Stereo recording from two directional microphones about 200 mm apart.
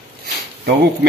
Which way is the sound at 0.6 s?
50° right (ahead or behind).